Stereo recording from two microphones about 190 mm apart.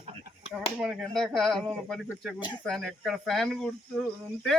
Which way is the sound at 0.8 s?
Centre (ahead or behind).